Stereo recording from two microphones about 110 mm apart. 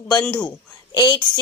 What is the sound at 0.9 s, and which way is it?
Speech, 40° left (ahead or behind).